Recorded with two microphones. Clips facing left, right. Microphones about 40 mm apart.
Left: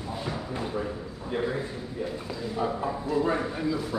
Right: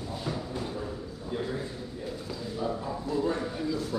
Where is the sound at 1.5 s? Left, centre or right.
Left.